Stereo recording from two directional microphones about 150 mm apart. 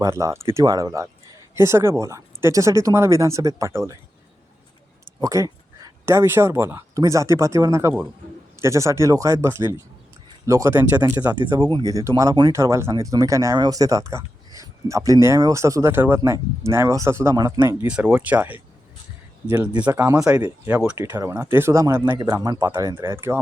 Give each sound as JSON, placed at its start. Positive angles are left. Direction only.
{"t": 0.0, "sound": "speech", "side_deg": -20}
{"t": 5.2, "sound": "speech", "side_deg": -20}
{"t": 11.3, "sound": "speech", "side_deg": -25}
{"t": 19.8, "sound": "speech", "side_deg": -15}
{"t": 20.9, "sound": "speech", "side_deg": -20}